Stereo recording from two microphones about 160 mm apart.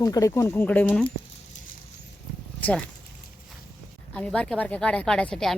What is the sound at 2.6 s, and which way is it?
Speech, 10° left (ahead or behind).